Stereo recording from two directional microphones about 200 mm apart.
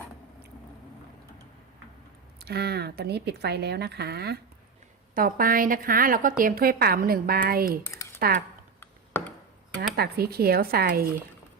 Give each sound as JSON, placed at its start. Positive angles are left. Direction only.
{"t": 2.4, "sound": "a woman's voice", "side_deg": -50}
{"t": 7.9, "sound": "computer keyboard", "side_deg": 15}
{"t": 8.2, "sound": "a woman's voice", "side_deg": -50}
{"t": 8.8, "sound": "a sound", "side_deg": 10}
{"t": 9.9, "sound": "a woman's voice", "side_deg": -50}